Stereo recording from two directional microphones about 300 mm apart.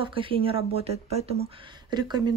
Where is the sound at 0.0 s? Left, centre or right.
Centre.